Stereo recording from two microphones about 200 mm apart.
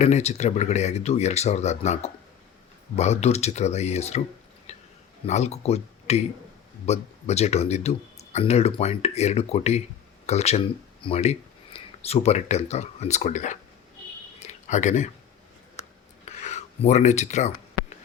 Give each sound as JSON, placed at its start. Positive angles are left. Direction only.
{"t": 0.0, "sound": "speech", "side_deg": 35}
{"t": 5.2, "sound": "speech", "side_deg": 35}
{"t": 14.3, "sound": "a sound", "side_deg": 35}